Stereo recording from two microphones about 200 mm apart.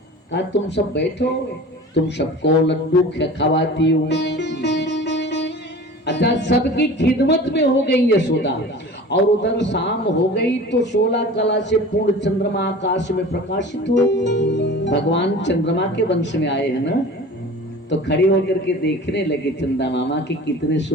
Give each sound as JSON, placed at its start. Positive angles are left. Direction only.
{"t": 0.3, "sound": "speech", "side_deg": 55}
{"t": 1.2, "sound": "speech", "side_deg": 60}
{"t": 3.2, "sound": "music", "side_deg": 60}
{"t": 6.1, "sound": "speech", "side_deg": 55}